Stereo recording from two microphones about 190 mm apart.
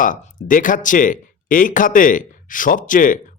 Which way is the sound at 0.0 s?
45° left (ahead or behind).